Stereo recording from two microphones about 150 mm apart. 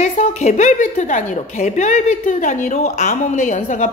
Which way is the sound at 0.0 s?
55° left (ahead or behind).